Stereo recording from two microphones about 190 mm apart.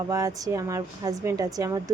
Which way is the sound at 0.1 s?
20° right (ahead or behind).